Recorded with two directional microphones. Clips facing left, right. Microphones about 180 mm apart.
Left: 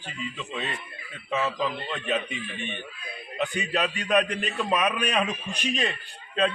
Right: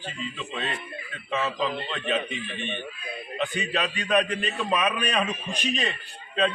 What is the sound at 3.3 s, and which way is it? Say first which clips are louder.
A man's voice: left 1 dB; 10° left (ahead or behind).